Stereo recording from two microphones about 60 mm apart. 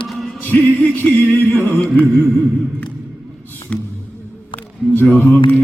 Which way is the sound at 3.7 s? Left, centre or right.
Left.